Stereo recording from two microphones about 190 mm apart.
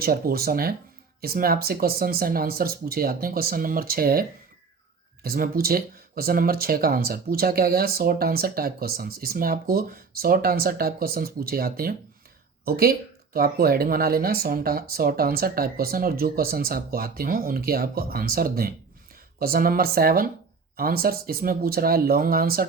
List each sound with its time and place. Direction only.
0.0 s speech: 50° right (ahead or behind)